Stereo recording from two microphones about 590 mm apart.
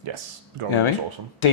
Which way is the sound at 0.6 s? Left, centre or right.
Right.